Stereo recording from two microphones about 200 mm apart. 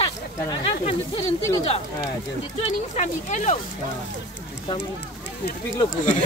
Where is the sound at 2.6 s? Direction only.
35° left (ahead or behind).